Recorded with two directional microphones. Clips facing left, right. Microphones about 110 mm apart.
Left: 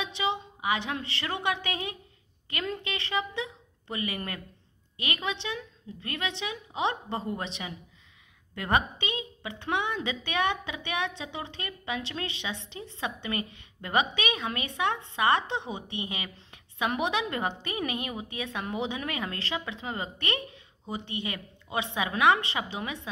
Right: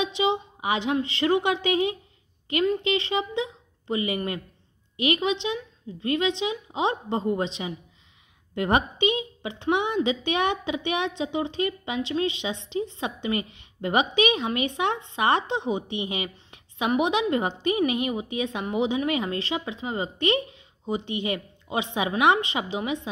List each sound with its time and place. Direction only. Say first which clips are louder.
0.0 s a woman's voice: right 6 dB; 20° right (ahead or behind)